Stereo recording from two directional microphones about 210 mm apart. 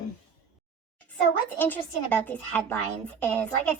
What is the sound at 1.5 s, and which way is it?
A woman's voice, 10° left (ahead or behind).